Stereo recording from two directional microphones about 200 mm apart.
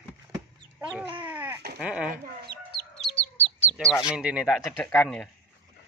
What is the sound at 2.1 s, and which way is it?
Chicken, 55° right (ahead or behind).